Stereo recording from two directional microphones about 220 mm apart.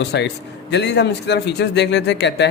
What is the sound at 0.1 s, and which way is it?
Speech, 50° left (ahead or behind).